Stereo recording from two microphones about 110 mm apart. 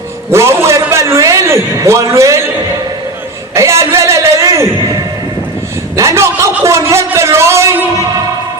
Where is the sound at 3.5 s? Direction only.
25° right (ahead or behind).